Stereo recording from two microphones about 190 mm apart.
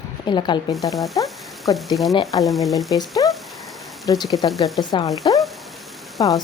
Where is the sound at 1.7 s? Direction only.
20° left (ahead or behind).